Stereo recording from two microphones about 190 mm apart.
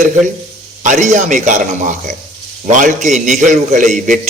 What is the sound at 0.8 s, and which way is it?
A man's voice, 40° right (ahead or behind).